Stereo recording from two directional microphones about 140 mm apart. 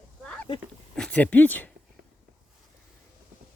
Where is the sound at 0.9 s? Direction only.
5° left (ahead or behind).